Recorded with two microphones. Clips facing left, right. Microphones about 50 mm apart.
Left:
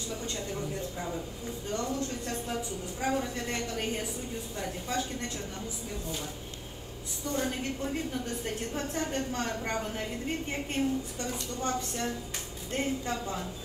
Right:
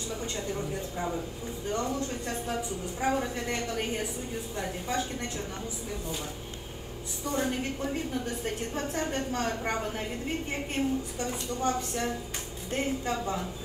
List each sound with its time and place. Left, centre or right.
0.1 s a woman's voice: right
7.2 s a woman's voice: right
8.7 s a woman's voice: right